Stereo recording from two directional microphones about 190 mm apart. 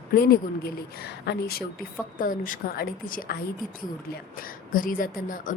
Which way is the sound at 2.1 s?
45° left (ahead or behind).